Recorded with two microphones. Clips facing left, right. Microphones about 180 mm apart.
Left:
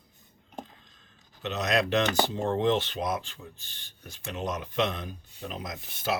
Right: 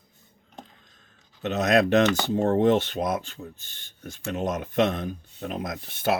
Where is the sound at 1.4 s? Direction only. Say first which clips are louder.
Right 6 dB; 50° right (ahead or behind).